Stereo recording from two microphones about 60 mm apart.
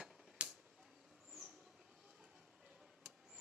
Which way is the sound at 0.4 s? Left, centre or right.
Centre.